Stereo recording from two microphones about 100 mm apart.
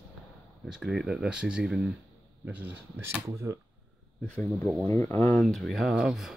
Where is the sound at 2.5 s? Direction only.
15° right (ahead or behind).